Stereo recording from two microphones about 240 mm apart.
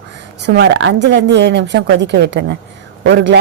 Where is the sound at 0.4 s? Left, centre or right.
Right.